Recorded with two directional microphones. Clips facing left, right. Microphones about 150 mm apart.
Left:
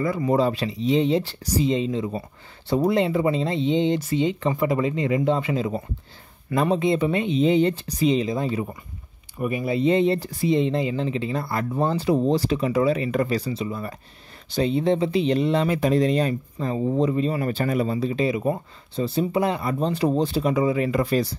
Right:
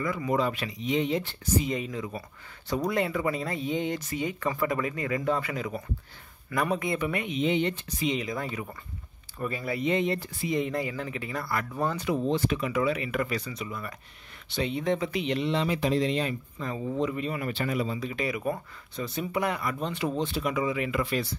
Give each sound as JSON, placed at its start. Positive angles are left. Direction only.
{"t": 0.0, "sound": "speech", "side_deg": 35}